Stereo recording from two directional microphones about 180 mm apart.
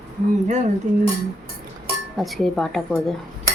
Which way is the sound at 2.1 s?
Centre (ahead or behind).